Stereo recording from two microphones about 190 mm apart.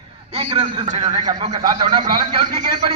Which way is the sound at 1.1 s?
25° right (ahead or behind).